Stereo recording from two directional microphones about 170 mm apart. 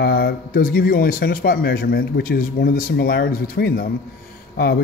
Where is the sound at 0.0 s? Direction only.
65° left (ahead or behind).